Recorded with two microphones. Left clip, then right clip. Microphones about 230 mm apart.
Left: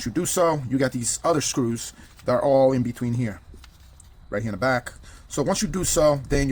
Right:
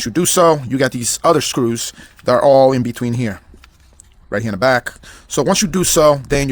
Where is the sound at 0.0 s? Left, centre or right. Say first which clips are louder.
Right 9 dB; right.